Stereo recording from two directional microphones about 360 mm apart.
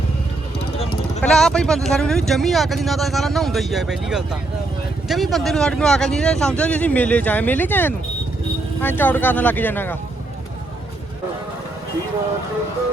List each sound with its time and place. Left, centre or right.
1.2 s speech: centre